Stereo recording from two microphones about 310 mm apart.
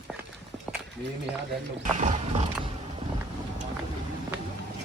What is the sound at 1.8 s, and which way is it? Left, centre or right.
Roaring cats, right.